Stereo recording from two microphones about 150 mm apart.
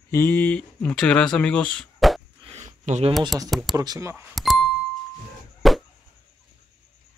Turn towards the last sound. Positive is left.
turn(degrees=0)  # may be behind; listen again after turning